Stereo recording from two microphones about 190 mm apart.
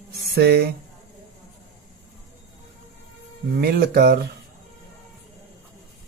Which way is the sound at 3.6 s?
55° right (ahead or behind).